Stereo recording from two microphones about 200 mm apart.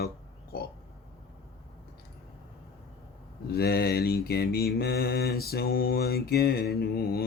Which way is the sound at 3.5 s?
50° left (ahead or behind).